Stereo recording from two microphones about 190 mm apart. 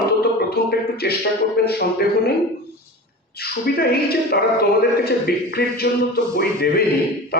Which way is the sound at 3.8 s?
55° left (ahead or behind).